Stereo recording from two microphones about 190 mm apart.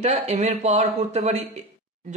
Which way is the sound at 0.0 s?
35° right (ahead or behind).